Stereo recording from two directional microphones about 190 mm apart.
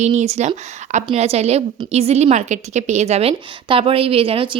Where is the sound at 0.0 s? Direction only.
35° right (ahead or behind).